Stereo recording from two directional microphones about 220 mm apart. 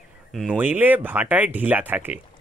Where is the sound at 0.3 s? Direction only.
Centre (ahead or behind).